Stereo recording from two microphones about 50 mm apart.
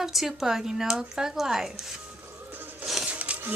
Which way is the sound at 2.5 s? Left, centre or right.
Right.